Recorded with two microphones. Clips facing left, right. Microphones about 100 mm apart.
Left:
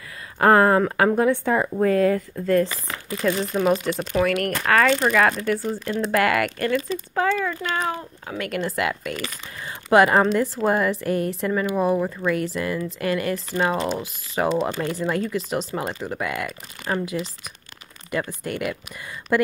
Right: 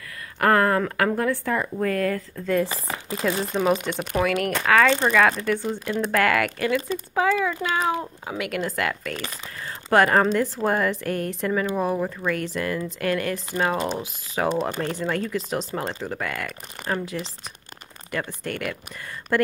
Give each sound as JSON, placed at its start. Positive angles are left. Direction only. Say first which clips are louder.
{"t": 0.4, "sound": "speech", "louder": "left 4 dB", "side_deg": 25}
{"t": 2.4, "sound": "speech", "louder": "left 2 dB", "side_deg": 0}